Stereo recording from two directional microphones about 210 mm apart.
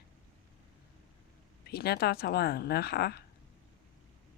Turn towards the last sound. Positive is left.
turn(degrees=50)  # may be behind; listen again after turning